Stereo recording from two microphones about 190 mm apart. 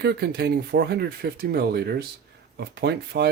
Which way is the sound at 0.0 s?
55° right (ahead or behind).